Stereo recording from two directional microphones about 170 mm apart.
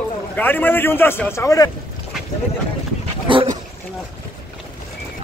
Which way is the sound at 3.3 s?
30° right (ahead or behind).